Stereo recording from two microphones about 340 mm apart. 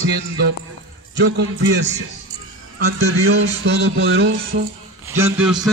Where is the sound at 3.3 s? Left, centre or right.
Right.